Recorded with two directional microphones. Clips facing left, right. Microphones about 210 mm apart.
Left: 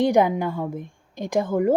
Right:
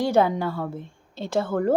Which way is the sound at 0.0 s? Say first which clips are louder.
Left 2 dB; 15° left (ahead or behind).